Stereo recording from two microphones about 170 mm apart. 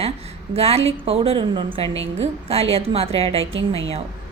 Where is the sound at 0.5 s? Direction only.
35° right (ahead or behind).